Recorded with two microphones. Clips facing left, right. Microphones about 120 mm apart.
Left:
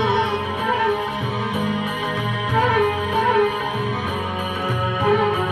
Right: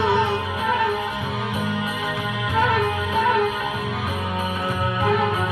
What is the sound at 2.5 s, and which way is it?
Music, 35° left (ahead or behind).